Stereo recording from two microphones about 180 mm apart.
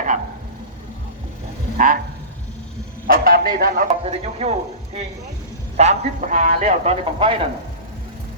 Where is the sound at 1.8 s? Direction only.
45° right (ahead or behind).